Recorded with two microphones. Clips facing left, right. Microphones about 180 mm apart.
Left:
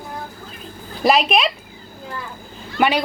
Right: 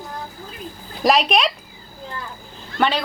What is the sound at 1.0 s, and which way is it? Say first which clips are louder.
Speech: left 1 dB; centre (ahead or behind).